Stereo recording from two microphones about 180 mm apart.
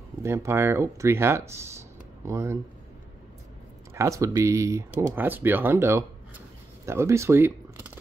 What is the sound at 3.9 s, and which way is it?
Speech, 15° right (ahead or behind).